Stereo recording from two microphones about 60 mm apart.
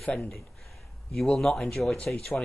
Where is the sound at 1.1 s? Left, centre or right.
Centre.